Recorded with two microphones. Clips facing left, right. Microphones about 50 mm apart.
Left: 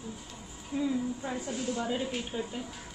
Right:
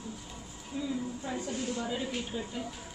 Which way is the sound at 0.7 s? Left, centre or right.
Left.